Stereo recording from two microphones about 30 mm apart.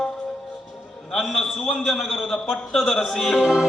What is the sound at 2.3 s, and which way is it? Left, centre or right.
A man's voice, centre.